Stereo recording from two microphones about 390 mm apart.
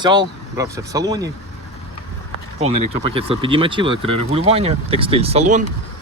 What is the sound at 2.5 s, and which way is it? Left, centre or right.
Speech, centre.